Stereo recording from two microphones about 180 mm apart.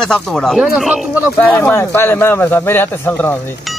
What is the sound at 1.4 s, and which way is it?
Speech, 10° left (ahead or behind).